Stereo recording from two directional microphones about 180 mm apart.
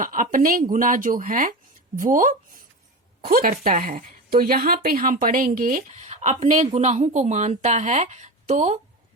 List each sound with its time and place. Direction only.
0.0 s a woman's voice: 50° right (ahead or behind)